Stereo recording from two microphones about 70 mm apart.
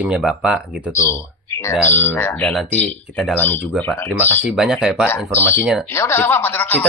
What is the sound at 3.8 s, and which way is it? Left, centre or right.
Speech, left.